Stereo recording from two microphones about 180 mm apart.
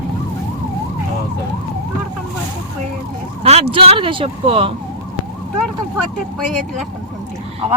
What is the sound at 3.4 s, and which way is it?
Speech, 35° right (ahead or behind).